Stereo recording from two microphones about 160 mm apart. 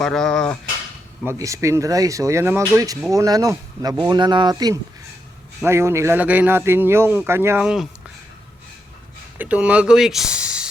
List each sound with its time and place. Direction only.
0.0 s speech: 5° left (ahead or behind)
1.2 s a man's voice: 15° right (ahead or behind)
9.4 s speech: 10° right (ahead or behind)